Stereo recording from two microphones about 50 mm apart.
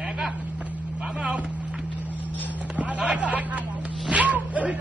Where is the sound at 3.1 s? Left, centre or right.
Right.